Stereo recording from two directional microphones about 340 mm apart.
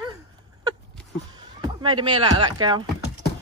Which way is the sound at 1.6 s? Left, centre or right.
Centre.